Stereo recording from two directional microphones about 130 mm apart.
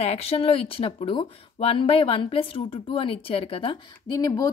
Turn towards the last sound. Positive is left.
turn(degrees=30)  # may be behind; listen again after turning